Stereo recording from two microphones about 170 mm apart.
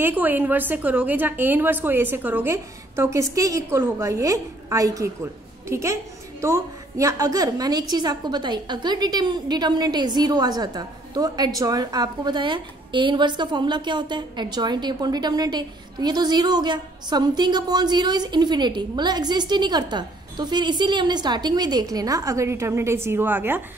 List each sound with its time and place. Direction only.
0.0 s a woman's voice: 10° right (ahead or behind)